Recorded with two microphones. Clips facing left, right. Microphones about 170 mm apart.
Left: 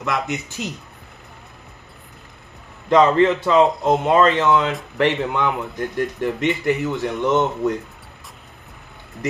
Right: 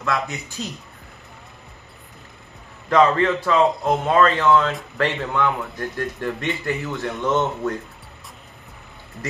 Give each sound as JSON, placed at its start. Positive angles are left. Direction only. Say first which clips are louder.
{"t": 0.0, "sound": "speech", "louder": "left 1 dB", "side_deg": 20}
{"t": 2.9, "sound": "speech", "louder": "left 3 dB", "side_deg": 20}